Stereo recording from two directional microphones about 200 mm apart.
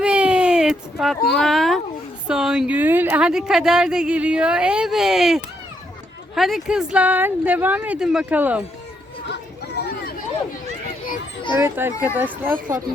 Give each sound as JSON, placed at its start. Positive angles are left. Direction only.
{"t": 0.0, "sound": "a sound", "side_deg": -5}
{"t": 1.3, "sound": "a woman's voice", "side_deg": 0}
{"t": 11.5, "sound": "speech", "side_deg": -10}
{"t": 12.5, "sound": "speech", "side_deg": -40}